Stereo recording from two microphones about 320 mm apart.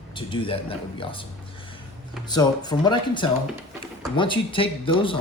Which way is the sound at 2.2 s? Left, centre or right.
Centre.